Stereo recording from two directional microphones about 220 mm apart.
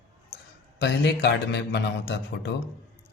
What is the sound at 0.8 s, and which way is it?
A man's voice, 50° left (ahead or behind).